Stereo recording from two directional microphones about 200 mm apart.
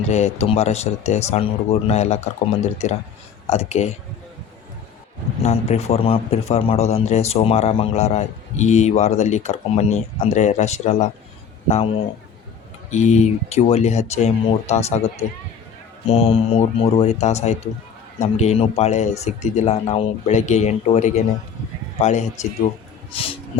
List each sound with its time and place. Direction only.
0.1 s a man's voice: 30° left (ahead or behind)
5.4 s a man's voice: 30° left (ahead or behind)
12.9 s a man's voice: 35° left (ahead or behind)
23.1 s a sound: 30° left (ahead or behind)